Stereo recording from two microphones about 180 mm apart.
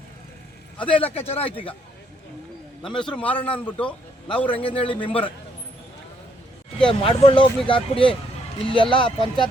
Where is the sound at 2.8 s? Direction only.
25° left (ahead or behind).